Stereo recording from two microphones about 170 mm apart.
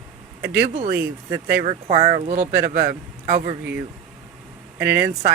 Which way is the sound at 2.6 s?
55° right (ahead or behind).